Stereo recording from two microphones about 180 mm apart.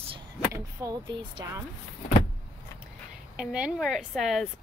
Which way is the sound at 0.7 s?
20° right (ahead or behind).